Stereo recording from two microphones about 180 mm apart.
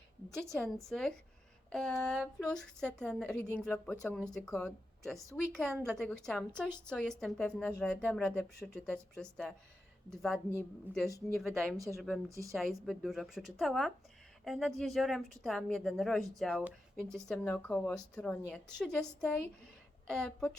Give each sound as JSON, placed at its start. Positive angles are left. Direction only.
{"t": 0.9, "sound": "speech", "side_deg": 5}
{"t": 12.3, "sound": "a woman's voice", "side_deg": -15}
{"t": 12.5, "sound": "speech", "side_deg": 0}